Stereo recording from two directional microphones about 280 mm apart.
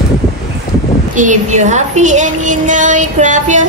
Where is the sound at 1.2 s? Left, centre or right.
Right.